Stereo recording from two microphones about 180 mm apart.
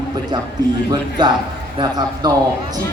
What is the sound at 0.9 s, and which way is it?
Speech, 25° right (ahead or behind).